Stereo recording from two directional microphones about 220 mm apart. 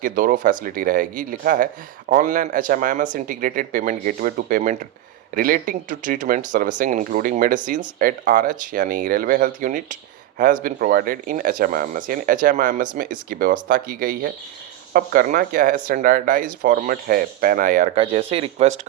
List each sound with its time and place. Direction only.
0.0 s speech: 40° right (ahead or behind)
17.9 s speech: 25° right (ahead or behind)